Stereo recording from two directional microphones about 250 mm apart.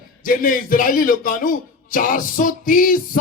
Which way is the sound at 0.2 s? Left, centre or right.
Left.